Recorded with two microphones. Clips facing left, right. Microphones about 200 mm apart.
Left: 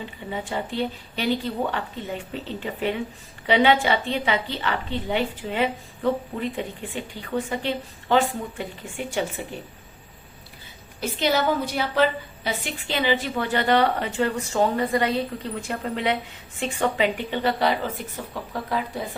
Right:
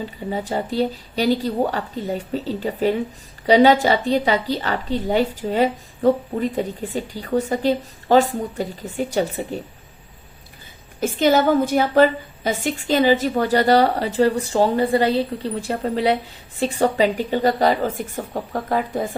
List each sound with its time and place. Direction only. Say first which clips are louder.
0.0 s a woman's voice: right 6 dB; 40° right (ahead or behind)
11.0 s a woman's voice: right 6 dB; 45° right (ahead or behind)